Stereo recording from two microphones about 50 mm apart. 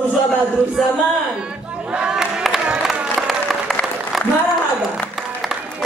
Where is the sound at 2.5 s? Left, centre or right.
Centre.